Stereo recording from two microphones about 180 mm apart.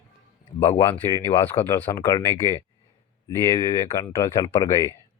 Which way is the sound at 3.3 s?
15° left (ahead or behind).